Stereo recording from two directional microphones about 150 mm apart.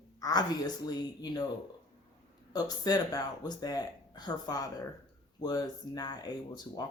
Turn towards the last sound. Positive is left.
turn(degrees=25)  # may be behind; listen again after turning